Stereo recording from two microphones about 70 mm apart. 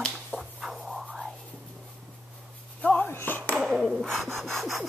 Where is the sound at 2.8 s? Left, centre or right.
Centre.